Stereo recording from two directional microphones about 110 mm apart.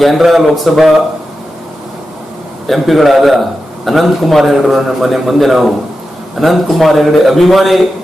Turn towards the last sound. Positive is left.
turn(degrees=0)  # may be behind; listen again after turning